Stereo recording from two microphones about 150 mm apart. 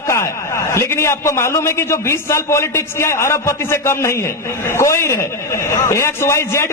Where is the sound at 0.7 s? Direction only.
15° left (ahead or behind).